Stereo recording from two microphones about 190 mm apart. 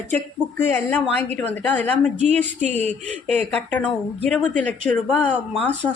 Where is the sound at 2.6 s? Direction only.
40° right (ahead or behind).